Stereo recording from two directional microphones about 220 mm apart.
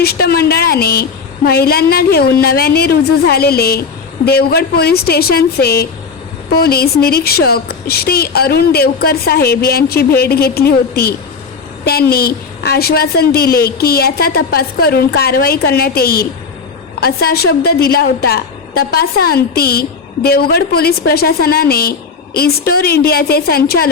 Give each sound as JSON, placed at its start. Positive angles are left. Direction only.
{"t": 0.0, "sound": "a woman's voice", "side_deg": 45}